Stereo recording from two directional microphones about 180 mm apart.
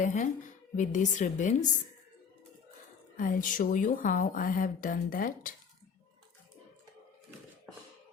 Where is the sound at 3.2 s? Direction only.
45° left (ahead or behind).